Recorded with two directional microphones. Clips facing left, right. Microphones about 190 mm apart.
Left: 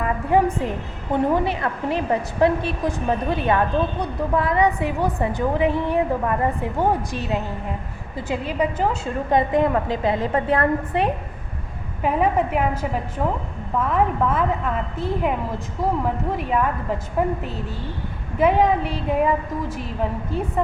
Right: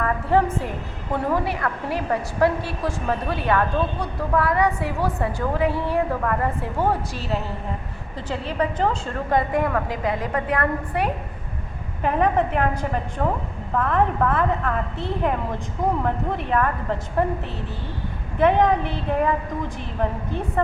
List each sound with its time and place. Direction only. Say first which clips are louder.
0.0 s a woman's voice: left 1 dB; 15° left (ahead or behind)
9.3 s a woman's voice: left 3 dB; 20° left (ahead or behind)
12.0 s a woman's voice: even; 5° left (ahead or behind)
16.0 s a woman's voice: left 1 dB; 5° left (ahead or behind)
18.3 s a woman's voice: even; 5° left (ahead or behind)